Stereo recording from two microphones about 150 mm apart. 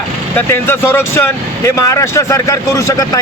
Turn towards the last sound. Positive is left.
turn(degrees=25)  # may be behind; listen again after turning